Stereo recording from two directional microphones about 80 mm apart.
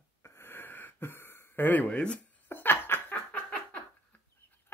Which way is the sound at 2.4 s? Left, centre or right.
Left.